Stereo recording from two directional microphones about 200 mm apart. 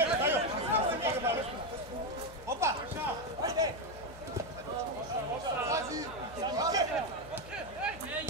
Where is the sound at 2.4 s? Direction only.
15° right (ahead or behind).